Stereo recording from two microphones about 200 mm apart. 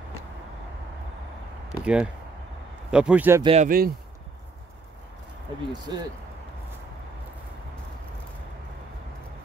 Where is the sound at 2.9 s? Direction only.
5° right (ahead or behind).